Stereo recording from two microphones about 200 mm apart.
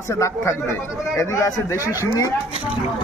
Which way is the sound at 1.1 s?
15° left (ahead or behind).